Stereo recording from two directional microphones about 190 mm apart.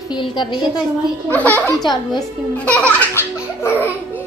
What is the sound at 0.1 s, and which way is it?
Speech, 25° left (ahead or behind).